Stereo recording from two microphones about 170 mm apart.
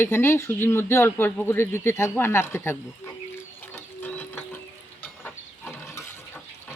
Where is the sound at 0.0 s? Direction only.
15° left (ahead or behind).